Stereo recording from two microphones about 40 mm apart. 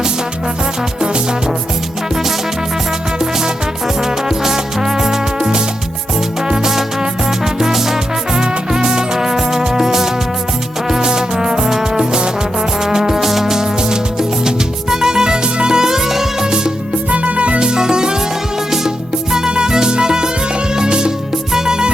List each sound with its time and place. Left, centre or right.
1.0 s music: right
3.2 s music: centre
17.1 s music: right
19.3 s music: centre